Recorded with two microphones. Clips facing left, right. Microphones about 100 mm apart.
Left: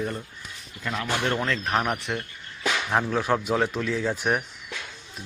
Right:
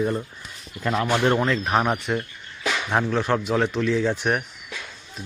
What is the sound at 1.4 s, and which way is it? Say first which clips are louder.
Speech: right 4 dB; 10° right (ahead or behind).